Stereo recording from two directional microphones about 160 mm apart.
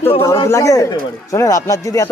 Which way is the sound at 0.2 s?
15° left (ahead or behind).